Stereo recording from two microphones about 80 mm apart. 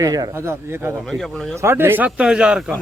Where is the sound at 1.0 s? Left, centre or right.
Centre.